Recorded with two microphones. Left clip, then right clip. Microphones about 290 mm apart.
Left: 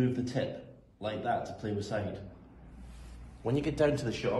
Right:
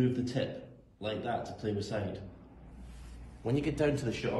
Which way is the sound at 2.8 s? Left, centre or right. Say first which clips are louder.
Even; left.